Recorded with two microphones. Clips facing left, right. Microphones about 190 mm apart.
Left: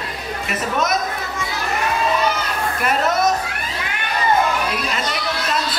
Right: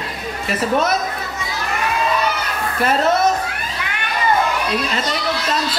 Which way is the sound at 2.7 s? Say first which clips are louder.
Right 4 dB; 30° right (ahead or behind).